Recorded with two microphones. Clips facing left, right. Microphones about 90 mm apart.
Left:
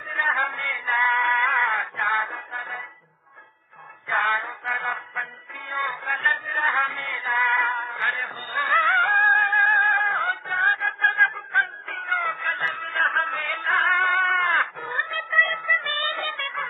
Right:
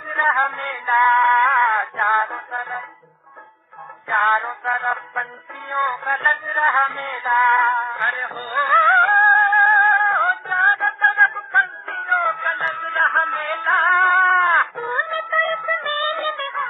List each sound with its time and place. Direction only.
0.1 s music: 40° right (ahead or behind)
4.1 s music: 35° right (ahead or behind)